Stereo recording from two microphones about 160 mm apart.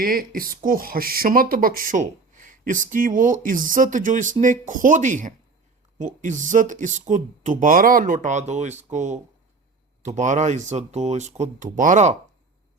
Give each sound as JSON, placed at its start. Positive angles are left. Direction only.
{"t": 0.0, "sound": "speech", "side_deg": -65}